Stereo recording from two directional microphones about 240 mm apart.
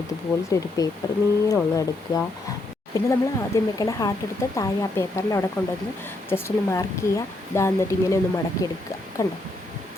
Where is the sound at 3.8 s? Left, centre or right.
Centre.